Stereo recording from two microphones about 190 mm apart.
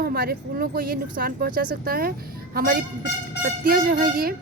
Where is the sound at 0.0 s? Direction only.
55° right (ahead or behind).